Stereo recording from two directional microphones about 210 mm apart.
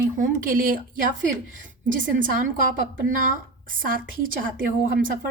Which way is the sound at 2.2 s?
40° right (ahead or behind).